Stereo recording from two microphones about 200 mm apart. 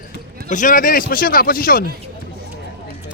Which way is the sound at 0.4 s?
40° left (ahead or behind).